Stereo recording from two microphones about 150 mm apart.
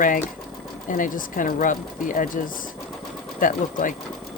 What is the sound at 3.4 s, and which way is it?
Speech, 65° left (ahead or behind).